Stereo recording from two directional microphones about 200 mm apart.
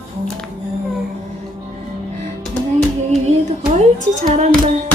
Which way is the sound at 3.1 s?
35° right (ahead or behind).